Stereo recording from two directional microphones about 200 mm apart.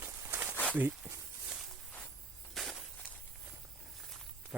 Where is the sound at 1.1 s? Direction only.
5° right (ahead or behind).